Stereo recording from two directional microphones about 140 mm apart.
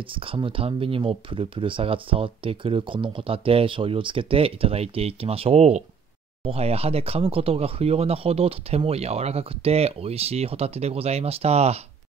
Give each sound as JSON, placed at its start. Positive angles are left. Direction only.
{"t": 0.1, "sound": "speech", "side_deg": -40}